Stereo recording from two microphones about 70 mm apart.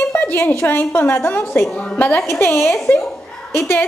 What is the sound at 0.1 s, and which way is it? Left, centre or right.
A woman's voice, left.